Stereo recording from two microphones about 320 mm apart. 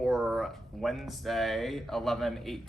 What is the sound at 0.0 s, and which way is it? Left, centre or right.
A man's voice, centre.